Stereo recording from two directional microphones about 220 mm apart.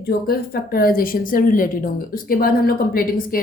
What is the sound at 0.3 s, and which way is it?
A woman's voice, 45° left (ahead or behind).